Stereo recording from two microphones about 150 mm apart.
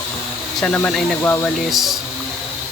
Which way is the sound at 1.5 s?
Centre (ahead or behind).